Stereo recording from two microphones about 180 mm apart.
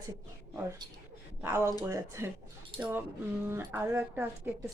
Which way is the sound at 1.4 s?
15° right (ahead or behind).